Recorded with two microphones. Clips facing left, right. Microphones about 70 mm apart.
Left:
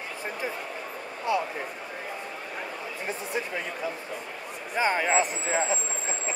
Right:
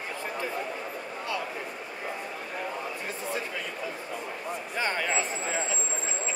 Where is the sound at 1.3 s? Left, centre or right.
Left.